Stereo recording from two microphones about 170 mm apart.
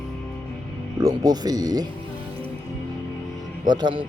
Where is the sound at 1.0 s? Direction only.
20° right (ahead or behind).